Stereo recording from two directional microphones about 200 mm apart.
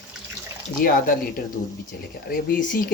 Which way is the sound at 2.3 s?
45° left (ahead or behind).